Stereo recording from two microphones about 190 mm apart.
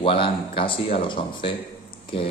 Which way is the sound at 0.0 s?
30° left (ahead or behind).